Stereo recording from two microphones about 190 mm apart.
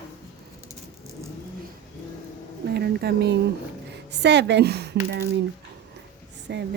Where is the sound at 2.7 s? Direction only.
55° right (ahead or behind).